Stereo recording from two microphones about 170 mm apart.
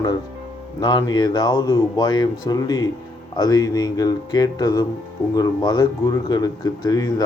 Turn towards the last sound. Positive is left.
turn(degrees=20)  # may be behind; listen again after turning